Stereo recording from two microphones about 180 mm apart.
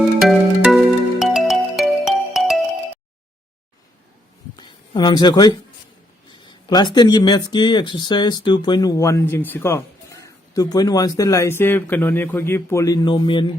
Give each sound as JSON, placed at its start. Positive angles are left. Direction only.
{"t": 0.2, "sound": "music", "side_deg": 0}
{"t": 4.5, "sound": "a sound", "side_deg": 25}
{"t": 6.4, "sound": "speech", "side_deg": 25}